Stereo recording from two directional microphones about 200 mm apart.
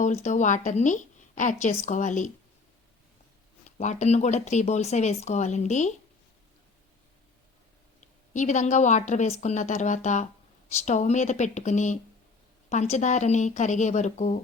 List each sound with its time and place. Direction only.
0.0 s a woman's voice: 35° left (ahead or behind)
3.8 s a woman's voice: 35° left (ahead or behind)
8.3 s a woman's voice: 35° left (ahead or behind)